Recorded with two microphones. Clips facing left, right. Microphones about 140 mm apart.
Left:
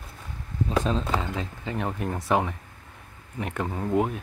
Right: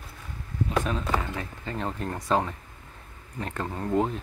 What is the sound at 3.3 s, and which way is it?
Speech, 15° left (ahead or behind).